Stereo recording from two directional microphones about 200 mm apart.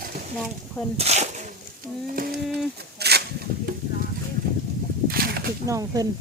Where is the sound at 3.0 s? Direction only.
55° right (ahead or behind).